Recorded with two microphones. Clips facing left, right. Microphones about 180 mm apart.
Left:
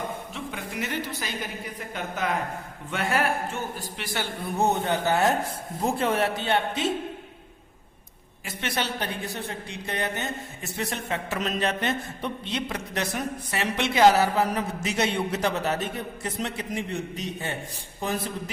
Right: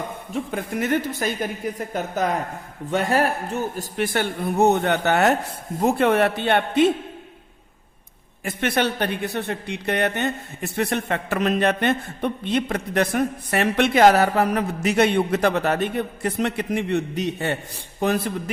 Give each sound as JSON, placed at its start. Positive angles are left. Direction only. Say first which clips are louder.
{"t": 0.3, "sound": "speech", "louder": "right 7 dB", "side_deg": -50}
{"t": 8.4, "sound": "speech", "louder": "right 8 dB", "side_deg": -55}